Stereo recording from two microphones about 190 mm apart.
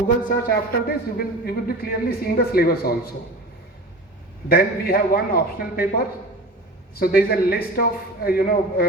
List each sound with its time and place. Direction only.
0.3 s speech: 50° left (ahead or behind)
4.4 s speech: 50° left (ahead or behind)
6.9 s speech: 50° left (ahead or behind)